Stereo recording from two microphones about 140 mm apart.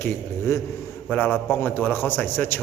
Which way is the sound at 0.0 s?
20° left (ahead or behind).